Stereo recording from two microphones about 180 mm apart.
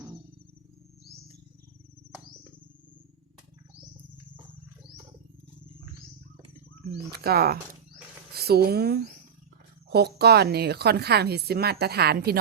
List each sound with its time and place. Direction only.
7.1 s speech: 60° right (ahead or behind)